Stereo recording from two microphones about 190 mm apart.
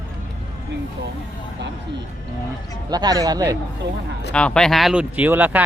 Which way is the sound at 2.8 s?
20° right (ahead or behind).